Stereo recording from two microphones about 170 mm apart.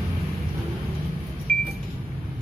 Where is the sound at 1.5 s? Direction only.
55° right (ahead or behind).